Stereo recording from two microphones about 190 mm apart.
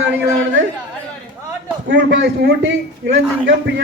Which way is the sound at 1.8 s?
65° right (ahead or behind).